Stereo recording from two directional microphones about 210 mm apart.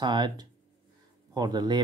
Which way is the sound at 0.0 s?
20° right (ahead or behind).